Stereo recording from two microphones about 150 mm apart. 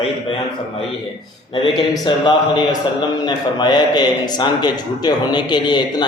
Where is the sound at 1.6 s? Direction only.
30° left (ahead or behind).